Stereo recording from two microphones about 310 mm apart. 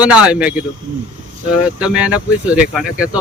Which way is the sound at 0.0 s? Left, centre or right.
Centre.